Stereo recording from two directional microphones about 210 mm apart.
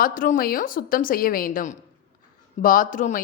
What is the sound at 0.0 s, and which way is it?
A woman's voice, 40° left (ahead or behind).